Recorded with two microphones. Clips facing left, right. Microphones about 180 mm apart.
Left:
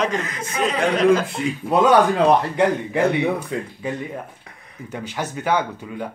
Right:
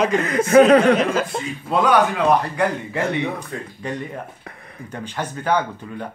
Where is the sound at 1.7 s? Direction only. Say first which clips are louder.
Left 2 dB; 25° left (ahead or behind).